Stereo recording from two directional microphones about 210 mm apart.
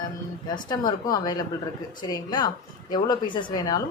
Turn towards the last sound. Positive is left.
turn(degrees=20)  # may be behind; listen again after turning